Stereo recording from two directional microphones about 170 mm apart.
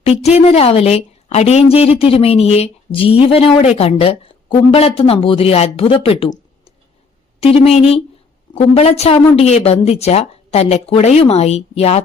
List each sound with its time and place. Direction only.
0.0 s a woman's voice: 40° left (ahead or behind)
7.4 s a woman's voice: 35° left (ahead or behind)